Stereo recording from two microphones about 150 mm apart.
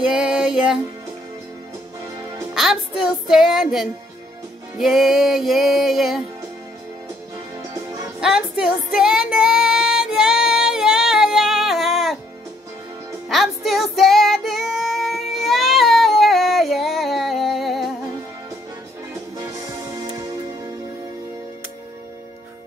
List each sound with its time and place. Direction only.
0.1 s music: 5° right (ahead or behind)
2.5 s music: 5° right (ahead or behind)
7.7 s music: 20° right (ahead or behind)
8.2 s music: 5° right (ahead or behind)
13.3 s music: centre (ahead or behind)
19.4 s music: 20° right (ahead or behind)